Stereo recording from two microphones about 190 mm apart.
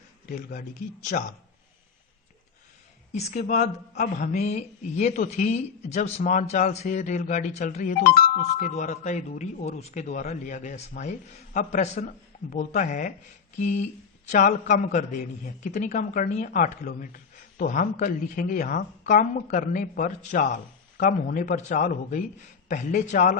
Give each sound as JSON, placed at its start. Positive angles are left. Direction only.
{"t": 0.3, "sound": "speech", "side_deg": 45}
{"t": 3.1, "sound": "a man's voice", "side_deg": 35}
{"t": 8.1, "sound": "a man's voice", "side_deg": 50}